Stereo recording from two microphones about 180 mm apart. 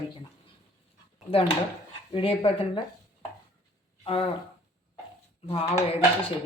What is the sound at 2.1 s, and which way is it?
Speech, 30° left (ahead or behind).